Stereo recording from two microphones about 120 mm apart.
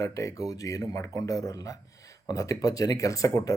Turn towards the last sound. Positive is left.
turn(degrees=30)  # may be behind; listen again after turning